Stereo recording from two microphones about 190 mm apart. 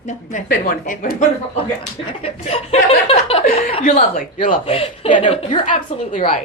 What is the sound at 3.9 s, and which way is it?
Speech, 45° left (ahead or behind).